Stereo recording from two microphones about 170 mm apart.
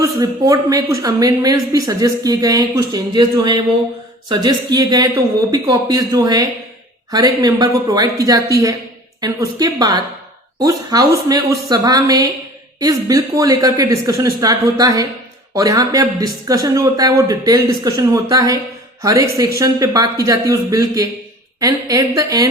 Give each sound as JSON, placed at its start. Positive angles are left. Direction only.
{"t": 0.0, "sound": "speech", "side_deg": -20}